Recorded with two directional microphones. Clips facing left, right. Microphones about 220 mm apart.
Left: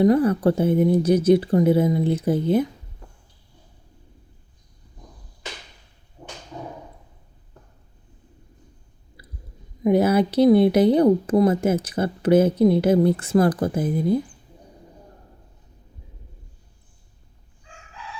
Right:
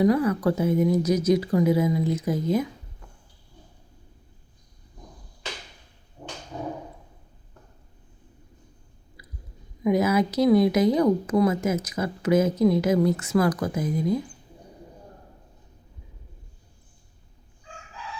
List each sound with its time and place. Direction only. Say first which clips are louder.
0.0 s speech: left 4 dB; 30° left (ahead or behind)
9.8 s speech: left 4 dB; 30° left (ahead or behind)